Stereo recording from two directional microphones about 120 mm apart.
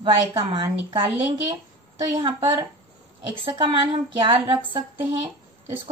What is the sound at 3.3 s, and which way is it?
A woman's voice, 45° right (ahead or behind).